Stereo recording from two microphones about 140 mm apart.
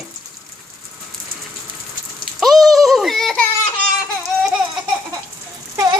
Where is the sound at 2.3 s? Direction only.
Centre (ahead or behind).